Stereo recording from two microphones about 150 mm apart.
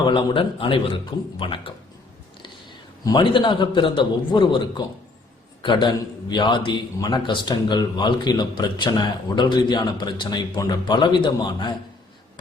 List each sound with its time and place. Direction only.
0.0 s a man's voice: 30° left (ahead or behind)
3.1 s a man's voice: 30° left (ahead or behind)